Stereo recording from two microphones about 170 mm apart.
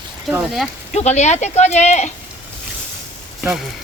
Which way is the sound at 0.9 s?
40° left (ahead or behind).